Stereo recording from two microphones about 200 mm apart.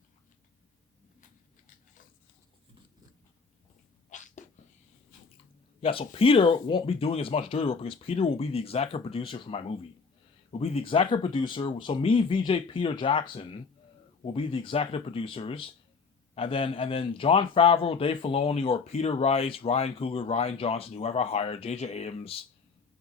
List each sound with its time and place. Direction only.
4.1 s cat: 40° left (ahead or behind)
5.8 s a man's voice: 30° left (ahead or behind)